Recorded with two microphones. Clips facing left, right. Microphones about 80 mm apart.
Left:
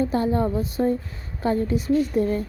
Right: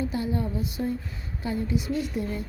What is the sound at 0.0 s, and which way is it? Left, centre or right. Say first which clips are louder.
A woman's voice: left 7 dB; left.